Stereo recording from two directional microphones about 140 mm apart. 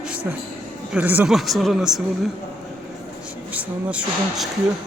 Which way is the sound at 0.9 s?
10° right (ahead or behind).